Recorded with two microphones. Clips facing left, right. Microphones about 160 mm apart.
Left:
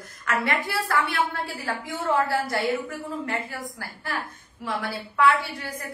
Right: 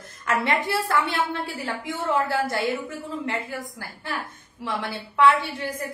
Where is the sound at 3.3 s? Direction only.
20° right (ahead or behind).